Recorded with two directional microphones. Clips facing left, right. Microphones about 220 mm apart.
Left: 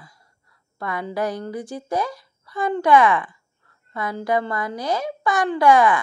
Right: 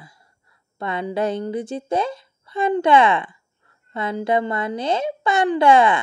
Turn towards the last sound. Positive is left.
turn(degrees=-25)  # may be behind; listen again after turning